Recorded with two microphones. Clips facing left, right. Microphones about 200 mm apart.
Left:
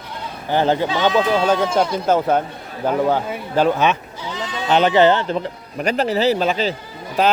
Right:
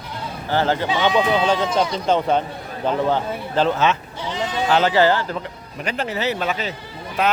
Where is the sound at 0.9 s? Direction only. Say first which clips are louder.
Left 1 dB; 15° right (ahead or behind).